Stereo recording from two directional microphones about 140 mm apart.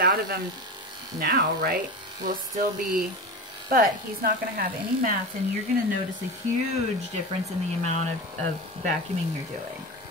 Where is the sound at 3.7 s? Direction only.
90° right.